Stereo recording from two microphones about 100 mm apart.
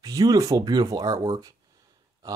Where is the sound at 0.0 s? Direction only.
35° right (ahead or behind).